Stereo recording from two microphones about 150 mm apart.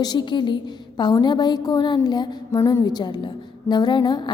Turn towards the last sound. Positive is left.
turn(degrees=30)  # may be behind; listen again after turning